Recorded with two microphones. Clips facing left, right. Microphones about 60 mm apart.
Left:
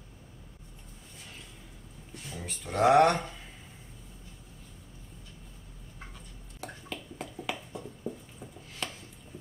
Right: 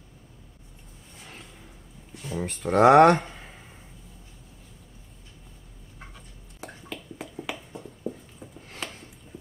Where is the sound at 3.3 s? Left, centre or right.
Right.